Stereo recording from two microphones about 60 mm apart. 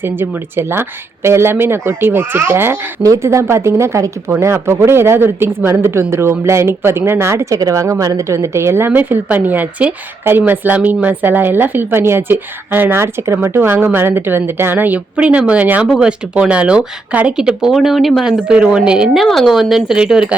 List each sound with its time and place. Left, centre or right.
0.0 s a woman's voice: right
3.2 s speech: right
7.5 s a woman's voice: right
8.9 s a woman's voice: right
17.3 s speech: centre
19.1 s speech: centre